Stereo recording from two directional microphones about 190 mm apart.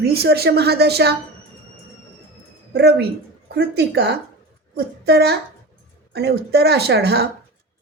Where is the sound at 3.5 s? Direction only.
60° right (ahead or behind).